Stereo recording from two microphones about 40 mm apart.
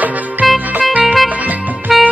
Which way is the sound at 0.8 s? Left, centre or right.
Right.